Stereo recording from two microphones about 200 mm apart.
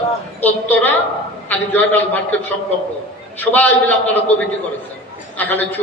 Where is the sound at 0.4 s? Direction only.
10° left (ahead or behind).